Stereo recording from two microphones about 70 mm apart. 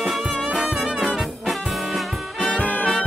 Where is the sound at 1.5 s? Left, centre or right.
Centre.